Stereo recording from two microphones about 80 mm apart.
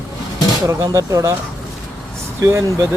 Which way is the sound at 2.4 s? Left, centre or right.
Right.